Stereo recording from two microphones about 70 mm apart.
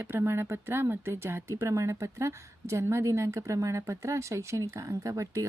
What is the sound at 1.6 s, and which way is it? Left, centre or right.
A woman's voice, right.